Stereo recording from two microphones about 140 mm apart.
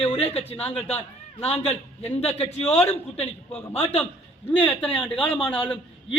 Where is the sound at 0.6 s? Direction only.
10° left (ahead or behind).